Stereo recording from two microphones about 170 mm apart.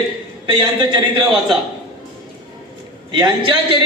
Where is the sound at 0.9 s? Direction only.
25° right (ahead or behind).